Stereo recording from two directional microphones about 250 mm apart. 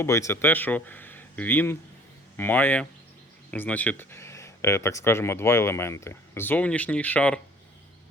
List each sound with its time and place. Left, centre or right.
0.0 s speech: centre